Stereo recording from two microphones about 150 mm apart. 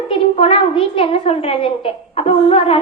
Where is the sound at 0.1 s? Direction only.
40° left (ahead or behind).